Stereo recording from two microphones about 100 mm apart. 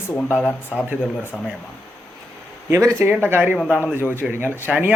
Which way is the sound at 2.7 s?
30° right (ahead or behind).